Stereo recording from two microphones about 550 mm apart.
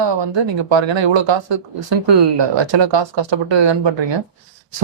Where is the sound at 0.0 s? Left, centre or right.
Right.